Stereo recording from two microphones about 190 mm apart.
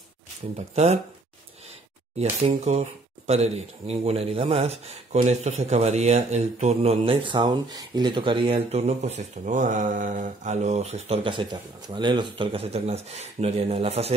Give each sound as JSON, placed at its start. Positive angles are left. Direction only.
{"t": 0.6, "sound": "speech", "side_deg": -35}
{"t": 2.4, "sound": "speech", "side_deg": -35}